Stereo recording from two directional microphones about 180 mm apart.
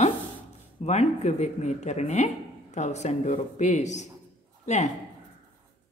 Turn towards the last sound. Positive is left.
turn(degrees=40)  # may be behind; listen again after turning